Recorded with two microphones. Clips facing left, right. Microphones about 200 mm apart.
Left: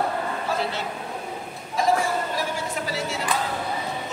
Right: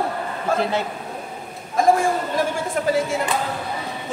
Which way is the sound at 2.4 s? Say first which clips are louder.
Right 6 dB; 50° right (ahead or behind).